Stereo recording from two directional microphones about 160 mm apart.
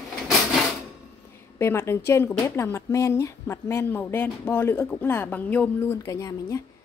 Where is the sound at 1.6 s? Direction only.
15° left (ahead or behind).